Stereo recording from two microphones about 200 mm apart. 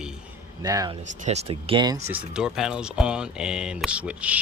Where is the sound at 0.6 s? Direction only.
20° right (ahead or behind).